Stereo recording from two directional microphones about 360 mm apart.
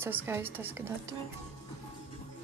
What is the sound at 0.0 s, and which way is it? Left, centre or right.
A woman's voice, centre.